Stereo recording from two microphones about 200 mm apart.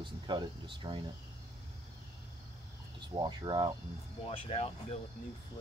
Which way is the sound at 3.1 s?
20° right (ahead or behind).